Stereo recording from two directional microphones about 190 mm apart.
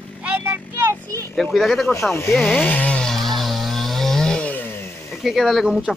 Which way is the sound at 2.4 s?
5° left (ahead or behind).